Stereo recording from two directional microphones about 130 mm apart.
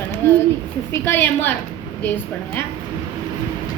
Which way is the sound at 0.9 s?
20° left (ahead or behind).